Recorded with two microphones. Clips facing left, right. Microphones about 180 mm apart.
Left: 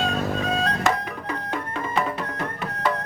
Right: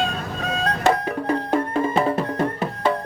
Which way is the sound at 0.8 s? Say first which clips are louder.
Right 5 dB; 30° right (ahead or behind).